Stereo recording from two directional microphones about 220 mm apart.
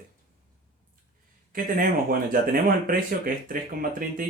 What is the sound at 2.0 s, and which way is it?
Speech, 40° right (ahead or behind).